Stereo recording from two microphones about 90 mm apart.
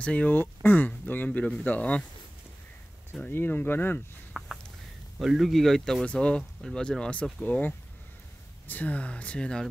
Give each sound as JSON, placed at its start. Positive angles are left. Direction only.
{"t": 0.0, "sound": "speech", "side_deg": 15}
{"t": 3.3, "sound": "speech", "side_deg": 20}
{"t": 4.4, "sound": "a sound", "side_deg": -10}
{"t": 5.2, "sound": "speech", "side_deg": -5}